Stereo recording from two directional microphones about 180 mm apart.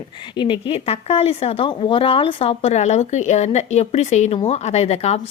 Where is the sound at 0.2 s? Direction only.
25° left (ahead or behind).